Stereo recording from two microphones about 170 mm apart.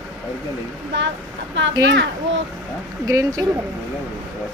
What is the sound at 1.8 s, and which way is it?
Speech, 90° right.